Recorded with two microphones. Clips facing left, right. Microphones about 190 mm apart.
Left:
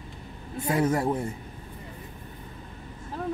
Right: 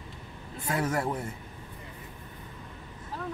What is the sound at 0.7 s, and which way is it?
Speech, 25° left (ahead or behind).